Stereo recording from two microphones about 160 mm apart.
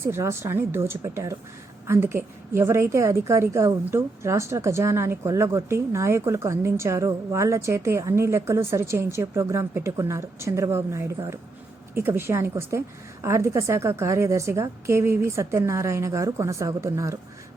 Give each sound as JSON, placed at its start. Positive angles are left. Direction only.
{"t": 0.0, "sound": "a woman's voice", "side_deg": -15}